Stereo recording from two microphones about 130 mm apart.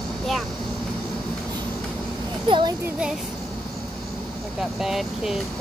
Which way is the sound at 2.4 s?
40° right (ahead or behind).